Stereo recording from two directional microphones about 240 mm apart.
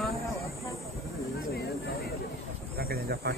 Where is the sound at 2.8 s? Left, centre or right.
Right.